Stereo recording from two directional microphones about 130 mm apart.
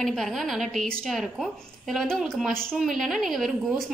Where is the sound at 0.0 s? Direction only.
Centre (ahead or behind).